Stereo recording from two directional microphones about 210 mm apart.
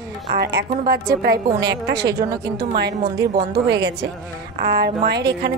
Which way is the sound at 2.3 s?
20° right (ahead or behind).